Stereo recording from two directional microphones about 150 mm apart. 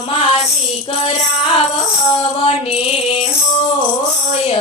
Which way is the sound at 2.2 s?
40° left (ahead or behind).